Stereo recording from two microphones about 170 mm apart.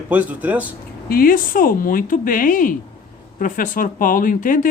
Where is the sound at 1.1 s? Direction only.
55° left (ahead or behind).